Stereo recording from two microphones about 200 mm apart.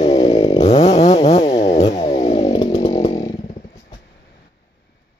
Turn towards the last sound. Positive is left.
turn(degrees=30)  # may be behind; listen again after turning